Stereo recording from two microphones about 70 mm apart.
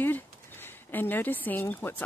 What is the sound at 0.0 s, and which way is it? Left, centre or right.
Speech, left.